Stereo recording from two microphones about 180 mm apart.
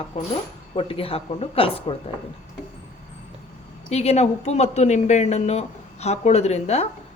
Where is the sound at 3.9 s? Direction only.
35° left (ahead or behind).